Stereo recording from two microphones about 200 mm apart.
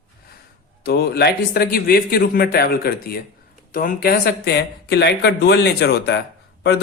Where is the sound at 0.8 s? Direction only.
55° left (ahead or behind).